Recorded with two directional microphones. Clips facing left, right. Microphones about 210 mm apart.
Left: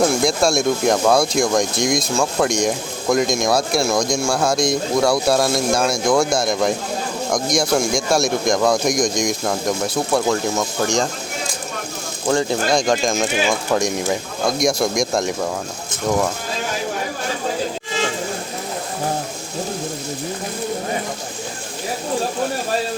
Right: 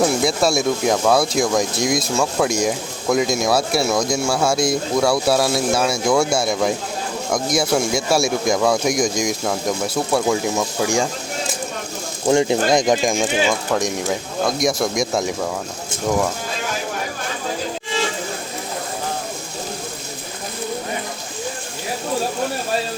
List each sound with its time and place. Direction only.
0.0 s speech: 5° right (ahead or behind)
12.3 s speech: 20° right (ahead or behind)
13.7 s speech: centre (ahead or behind)